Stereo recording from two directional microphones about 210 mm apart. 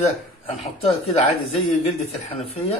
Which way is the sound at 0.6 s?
30° left (ahead or behind).